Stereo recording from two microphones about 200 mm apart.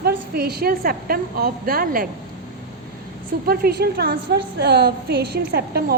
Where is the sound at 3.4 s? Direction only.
50° right (ahead or behind).